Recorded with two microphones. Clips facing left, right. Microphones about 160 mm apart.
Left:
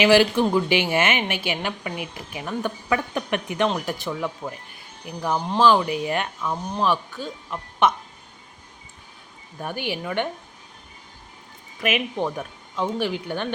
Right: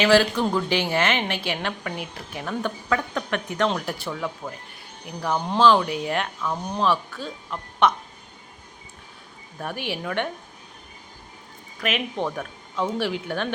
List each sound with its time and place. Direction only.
0.0 s a woman's voice: 10° left (ahead or behind)
6.9 s a woman's voice: 15° left (ahead or behind)
9.6 s speech: centre (ahead or behind)
11.8 s speech: 10° left (ahead or behind)